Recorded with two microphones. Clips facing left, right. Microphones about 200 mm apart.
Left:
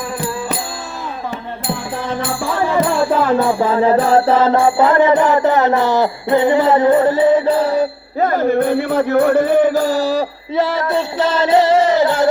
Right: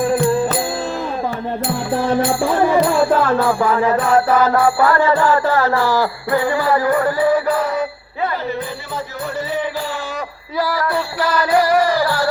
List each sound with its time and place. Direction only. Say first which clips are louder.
3.2 s music: left 1 dB; 20° left (ahead or behind)
8.3 s music: left 9 dB; 50° left (ahead or behind); by 12.3 s 20° left (ahead or behind)